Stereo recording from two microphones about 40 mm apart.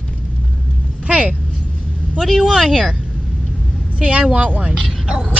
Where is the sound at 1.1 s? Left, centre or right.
Right.